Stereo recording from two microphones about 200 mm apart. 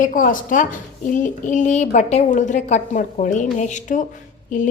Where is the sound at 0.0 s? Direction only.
40° left (ahead or behind).